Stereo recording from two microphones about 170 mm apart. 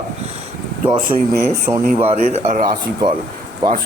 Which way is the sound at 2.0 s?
35° right (ahead or behind).